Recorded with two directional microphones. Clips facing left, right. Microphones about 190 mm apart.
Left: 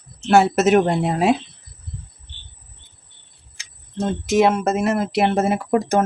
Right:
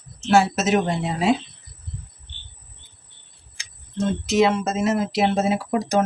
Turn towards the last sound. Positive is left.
turn(degrees=55)  # may be behind; listen again after turning